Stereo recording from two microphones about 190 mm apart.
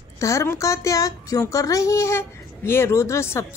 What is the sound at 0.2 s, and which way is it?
Speech, 15° left (ahead or behind).